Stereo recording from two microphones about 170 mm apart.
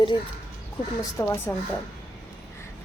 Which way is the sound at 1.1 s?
15° left (ahead or behind).